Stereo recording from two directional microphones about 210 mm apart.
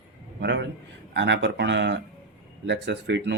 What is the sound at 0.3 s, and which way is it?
A man's voice, 55° right (ahead or behind).